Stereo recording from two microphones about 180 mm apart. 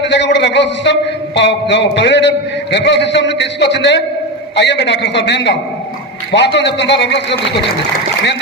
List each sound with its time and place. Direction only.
0.0 s a man's voice: 75° left (ahead or behind)